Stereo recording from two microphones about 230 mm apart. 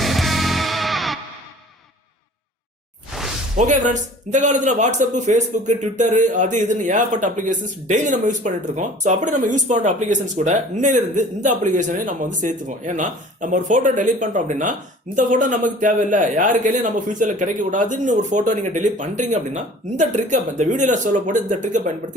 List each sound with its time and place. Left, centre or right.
0.0 s music: centre
3.1 s a sound: centre
3.6 s a man's voice: right